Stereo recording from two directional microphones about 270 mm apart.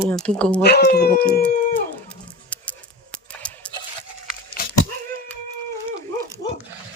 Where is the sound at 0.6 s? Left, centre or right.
Left.